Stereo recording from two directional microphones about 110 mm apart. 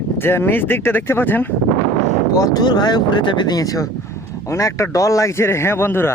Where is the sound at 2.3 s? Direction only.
30° left (ahead or behind).